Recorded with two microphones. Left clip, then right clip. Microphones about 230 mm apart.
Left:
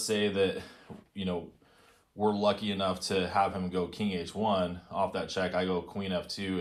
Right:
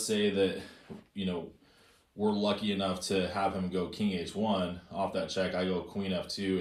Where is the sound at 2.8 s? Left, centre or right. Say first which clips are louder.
Left 3 dB; centre.